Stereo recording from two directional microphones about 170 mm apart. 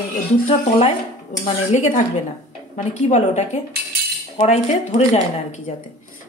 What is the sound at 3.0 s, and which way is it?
Speech, 40° left (ahead or behind).